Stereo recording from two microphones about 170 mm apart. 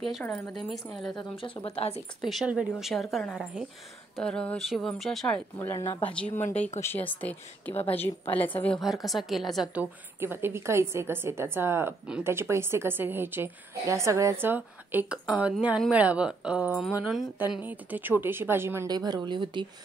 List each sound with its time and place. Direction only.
0.0 s speech: 5° left (ahead or behind)
1.1 s speech: 30° left (ahead or behind)
2.2 s speech: centre (ahead or behind)
5.6 s speech: 15° left (ahead or behind)
8.8 s speech: centre (ahead or behind)
10.2 s a woman's voice: 15° right (ahead or behind)